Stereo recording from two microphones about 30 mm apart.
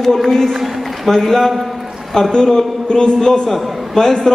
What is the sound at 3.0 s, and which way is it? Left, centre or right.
Speech, left.